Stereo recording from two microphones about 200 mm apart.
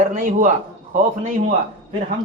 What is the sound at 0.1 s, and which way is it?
Speech, 40° right (ahead or behind).